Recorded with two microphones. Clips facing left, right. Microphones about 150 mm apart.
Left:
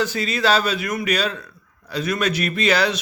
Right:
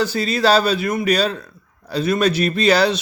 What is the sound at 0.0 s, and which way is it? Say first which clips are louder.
Speech: right 3 dB; 35° right (ahead or behind).